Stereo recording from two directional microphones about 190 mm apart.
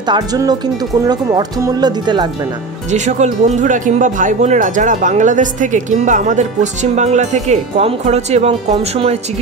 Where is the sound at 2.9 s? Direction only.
40° right (ahead or behind).